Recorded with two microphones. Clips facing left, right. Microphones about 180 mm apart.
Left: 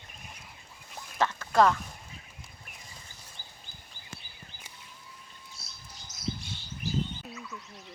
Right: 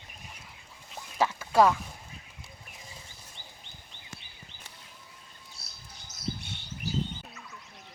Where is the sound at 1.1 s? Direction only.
10° right (ahead or behind).